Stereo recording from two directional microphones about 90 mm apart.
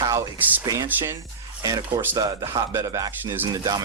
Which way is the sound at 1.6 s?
40° right (ahead or behind).